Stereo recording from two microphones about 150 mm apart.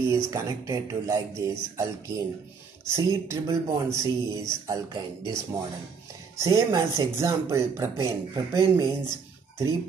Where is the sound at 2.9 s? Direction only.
20° right (ahead or behind).